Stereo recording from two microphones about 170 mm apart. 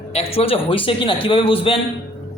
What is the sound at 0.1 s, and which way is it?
A man's voice, 35° left (ahead or behind).